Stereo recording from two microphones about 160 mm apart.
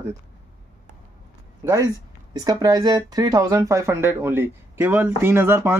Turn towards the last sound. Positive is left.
turn(degrees=-15)  # may be behind; listen again after turning